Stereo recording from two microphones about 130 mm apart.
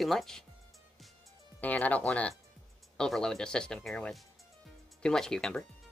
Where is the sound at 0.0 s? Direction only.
Centre (ahead or behind).